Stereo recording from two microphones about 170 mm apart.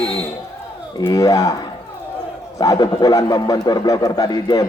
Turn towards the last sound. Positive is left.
turn(degrees=25)  # may be behind; listen again after turning